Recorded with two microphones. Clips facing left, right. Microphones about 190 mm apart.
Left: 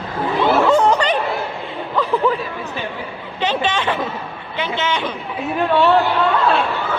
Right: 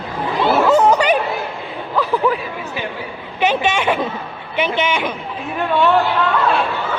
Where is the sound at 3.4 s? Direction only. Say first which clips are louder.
Right 3 dB; 10° right (ahead or behind).